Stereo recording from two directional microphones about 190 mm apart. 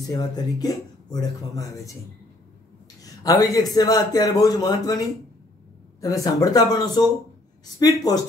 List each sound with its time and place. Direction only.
0.0 s a man's voice: 20° left (ahead or behind)
3.0 s a man's voice: 20° left (ahead or behind)